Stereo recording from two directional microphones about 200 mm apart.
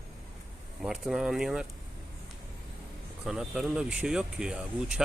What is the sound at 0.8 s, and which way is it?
Speech, centre (ahead or behind).